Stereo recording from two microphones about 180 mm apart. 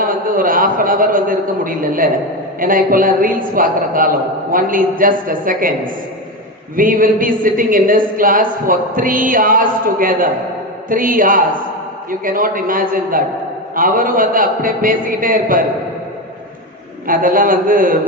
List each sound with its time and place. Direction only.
0.0 s a man's voice: 50° right (ahead or behind)
17.1 s speech: 50° right (ahead or behind)